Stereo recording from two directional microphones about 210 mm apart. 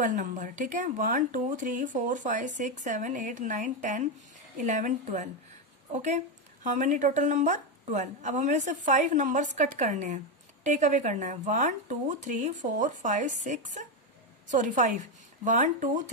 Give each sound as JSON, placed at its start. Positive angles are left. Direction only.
{"t": 0.0, "sound": "speech", "side_deg": -35}